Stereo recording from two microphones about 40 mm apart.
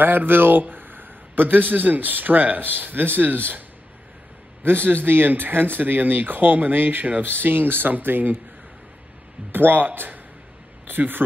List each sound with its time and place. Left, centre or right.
0.0 s a man's voice: right
4.6 s speech: right
9.5 s speech: right